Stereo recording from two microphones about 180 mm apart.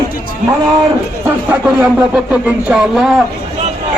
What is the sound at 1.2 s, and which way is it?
A man's voice, 10° right (ahead or behind).